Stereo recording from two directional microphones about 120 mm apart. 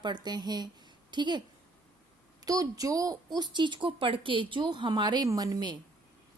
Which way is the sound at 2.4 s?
30° right (ahead or behind).